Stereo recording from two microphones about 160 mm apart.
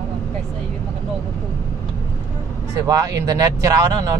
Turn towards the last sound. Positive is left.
turn(degrees=-20)  # may be behind; listen again after turning